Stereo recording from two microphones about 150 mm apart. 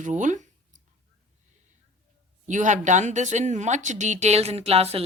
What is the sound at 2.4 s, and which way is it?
A woman's voice, 55° right (ahead or behind).